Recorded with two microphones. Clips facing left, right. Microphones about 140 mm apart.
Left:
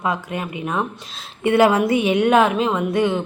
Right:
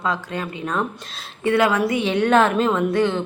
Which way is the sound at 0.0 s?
20° left (ahead or behind).